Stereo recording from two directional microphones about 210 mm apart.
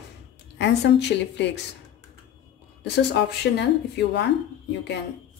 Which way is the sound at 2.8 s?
55° left (ahead or behind).